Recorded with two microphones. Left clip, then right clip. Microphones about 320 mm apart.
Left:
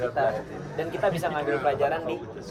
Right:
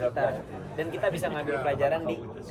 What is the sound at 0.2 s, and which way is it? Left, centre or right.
Speech, centre.